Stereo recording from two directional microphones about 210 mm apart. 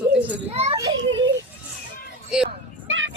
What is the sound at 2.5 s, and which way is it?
Vehicle, 65° right (ahead or behind).